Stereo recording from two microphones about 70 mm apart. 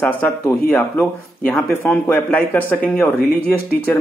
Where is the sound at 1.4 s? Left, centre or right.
Left.